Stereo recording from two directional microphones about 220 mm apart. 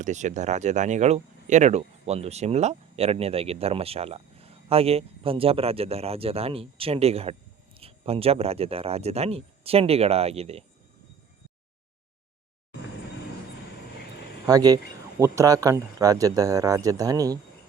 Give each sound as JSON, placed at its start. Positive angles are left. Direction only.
{"t": 0.0, "sound": "speech", "side_deg": -35}
{"t": 14.4, "sound": "speech", "side_deg": -15}